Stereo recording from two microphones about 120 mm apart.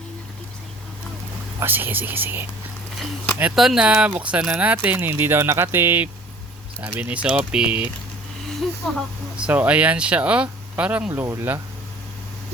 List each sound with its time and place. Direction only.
1.6 s speech: 15° right (ahead or behind)
3.5 s speech: 5° right (ahead or behind)
8.8 s speech: centre (ahead or behind)
9.4 s speech: 10° right (ahead or behind)
11.1 s speech: 20° right (ahead or behind)